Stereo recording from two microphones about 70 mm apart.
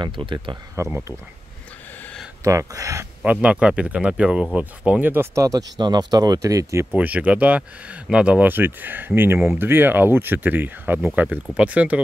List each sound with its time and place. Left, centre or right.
0.8 s speech: right
2.4 s speech: right
3.3 s speech: centre
5.0 s speech: right
5.3 s speech: right
6.9 s speech: right